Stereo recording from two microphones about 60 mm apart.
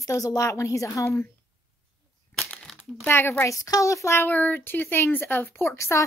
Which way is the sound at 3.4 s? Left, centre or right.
Left.